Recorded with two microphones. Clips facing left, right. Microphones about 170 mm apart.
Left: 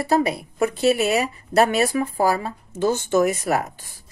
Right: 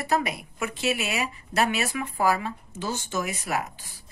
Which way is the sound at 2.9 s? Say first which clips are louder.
Left 11 dB; 50° left (ahead or behind).